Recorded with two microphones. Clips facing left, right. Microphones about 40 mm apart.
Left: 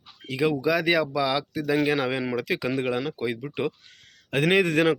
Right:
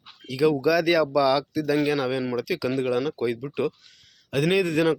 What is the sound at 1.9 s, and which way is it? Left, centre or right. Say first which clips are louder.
Speech: even; left.